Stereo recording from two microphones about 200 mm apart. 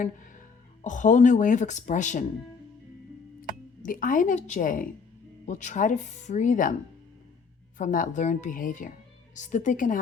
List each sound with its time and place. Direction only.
0.0 s music: 40° left (ahead or behind)
0.9 s speech: 40° left (ahead or behind)
3.8 s speech: 40° left (ahead or behind)
7.8 s speech: 40° left (ahead or behind)